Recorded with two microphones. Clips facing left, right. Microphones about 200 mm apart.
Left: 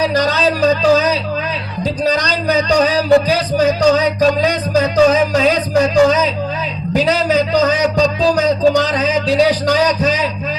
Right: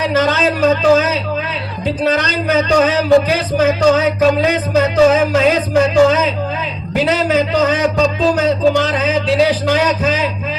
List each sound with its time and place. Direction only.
0.1 s a man's voice: 35° left (ahead or behind)